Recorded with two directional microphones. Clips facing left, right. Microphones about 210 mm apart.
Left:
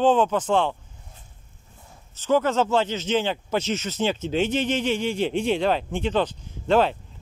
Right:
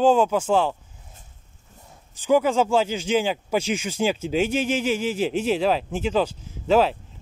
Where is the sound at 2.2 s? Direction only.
10° right (ahead or behind).